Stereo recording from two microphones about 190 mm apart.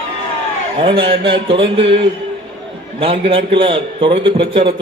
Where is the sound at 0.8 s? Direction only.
30° right (ahead or behind).